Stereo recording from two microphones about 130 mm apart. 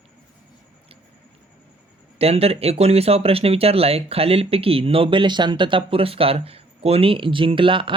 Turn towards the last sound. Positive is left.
turn(degrees=-40)  # may be behind; listen again after turning